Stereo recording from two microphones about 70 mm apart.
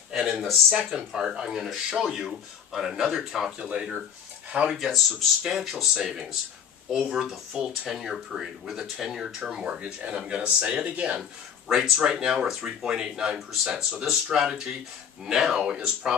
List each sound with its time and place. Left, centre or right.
0.1 s speech: centre
11.7 s speech: centre